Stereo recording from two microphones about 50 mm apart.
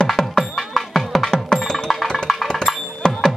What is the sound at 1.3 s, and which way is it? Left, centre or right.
Music, centre.